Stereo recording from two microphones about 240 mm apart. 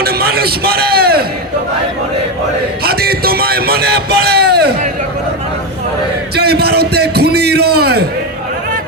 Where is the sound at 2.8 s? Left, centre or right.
Right.